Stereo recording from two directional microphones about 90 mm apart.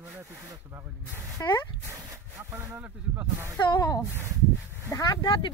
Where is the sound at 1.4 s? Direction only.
30° left (ahead or behind).